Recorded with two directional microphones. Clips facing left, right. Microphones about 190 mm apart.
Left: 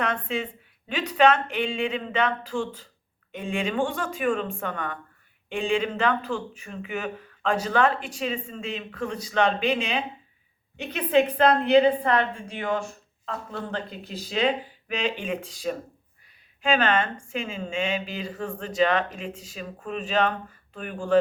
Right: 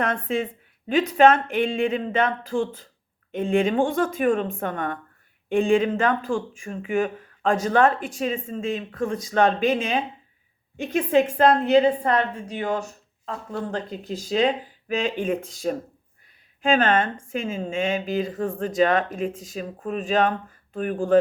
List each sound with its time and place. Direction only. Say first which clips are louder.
0.0 s a woman's voice: right 3 dB; 50° right (ahead or behind)